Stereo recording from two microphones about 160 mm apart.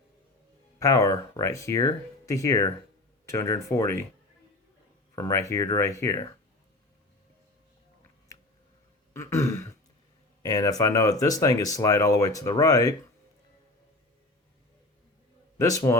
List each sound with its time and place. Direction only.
0.8 s speech: 20° left (ahead or behind)
5.1 s speech: 15° left (ahead or behind)
9.1 s throat clearing: 15° left (ahead or behind)
10.4 s speech: 20° left (ahead or behind)
15.5 s speech: 20° left (ahead or behind)